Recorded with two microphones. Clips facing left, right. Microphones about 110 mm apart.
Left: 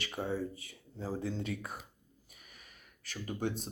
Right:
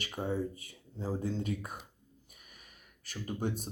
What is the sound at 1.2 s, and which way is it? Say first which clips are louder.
Speech: right 2 dB; 45° right (ahead or behind).